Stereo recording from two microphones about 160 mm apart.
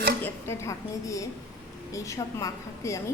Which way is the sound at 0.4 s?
15° left (ahead or behind).